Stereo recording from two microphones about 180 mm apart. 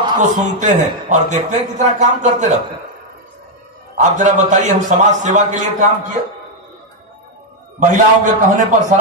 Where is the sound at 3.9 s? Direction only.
45° right (ahead or behind).